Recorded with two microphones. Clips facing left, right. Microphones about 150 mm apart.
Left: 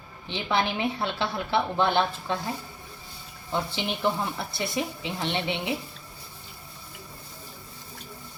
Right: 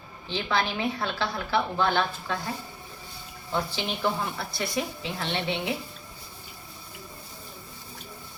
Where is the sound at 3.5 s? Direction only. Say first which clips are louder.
Even; 20° left (ahead or behind).